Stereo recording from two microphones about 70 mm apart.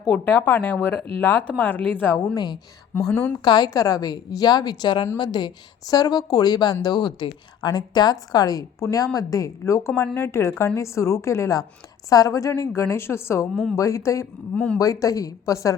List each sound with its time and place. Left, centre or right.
0.3 s speech: left
2.1 s a woman's voice: left
3.0 s a woman's voice: centre
3.4 s a woman's voice: left
3.7 s a woman's voice: left
6.8 s a woman's voice: left
12.0 s a woman's voice: left
14.5 s a woman's voice: centre
14.8 s a woman's voice: left